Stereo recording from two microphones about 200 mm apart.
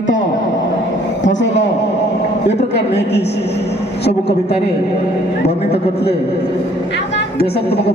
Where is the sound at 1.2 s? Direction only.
60° left (ahead or behind).